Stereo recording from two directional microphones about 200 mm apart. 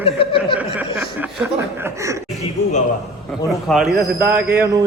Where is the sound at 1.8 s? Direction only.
15° right (ahead or behind).